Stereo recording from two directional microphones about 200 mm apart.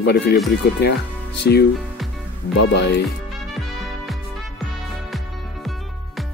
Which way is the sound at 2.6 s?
60° left (ahead or behind).